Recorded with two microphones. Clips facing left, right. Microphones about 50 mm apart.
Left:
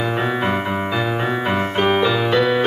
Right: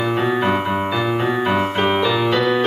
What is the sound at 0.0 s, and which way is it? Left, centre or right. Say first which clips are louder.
Music: right 2 dB; centre.